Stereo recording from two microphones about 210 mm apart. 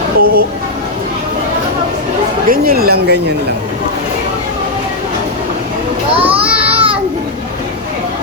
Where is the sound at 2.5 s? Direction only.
45° right (ahead or behind).